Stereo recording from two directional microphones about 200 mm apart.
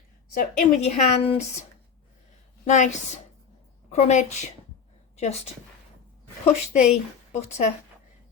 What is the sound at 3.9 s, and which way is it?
A woman's voice, 35° left (ahead or behind).